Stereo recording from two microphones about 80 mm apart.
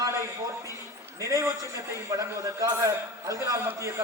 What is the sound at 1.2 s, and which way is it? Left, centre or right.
A man's voice, right.